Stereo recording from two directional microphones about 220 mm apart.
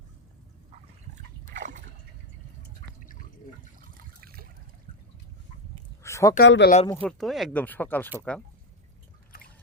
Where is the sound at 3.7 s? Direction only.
40° right (ahead or behind).